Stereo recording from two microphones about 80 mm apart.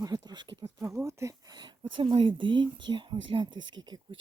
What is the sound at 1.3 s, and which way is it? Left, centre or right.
Speech, right.